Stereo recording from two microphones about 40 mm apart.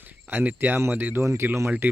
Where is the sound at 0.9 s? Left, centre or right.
Right.